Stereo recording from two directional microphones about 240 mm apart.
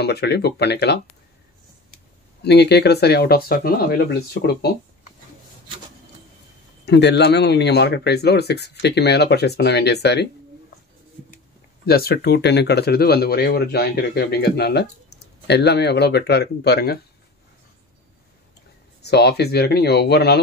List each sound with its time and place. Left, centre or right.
0.0 s speech: left
2.4 s speech: left
6.9 s speech: left
11.8 s speech: left
18.9 s speech: left